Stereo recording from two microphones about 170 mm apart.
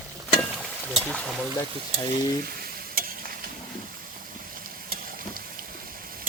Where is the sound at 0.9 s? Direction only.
5° left (ahead or behind).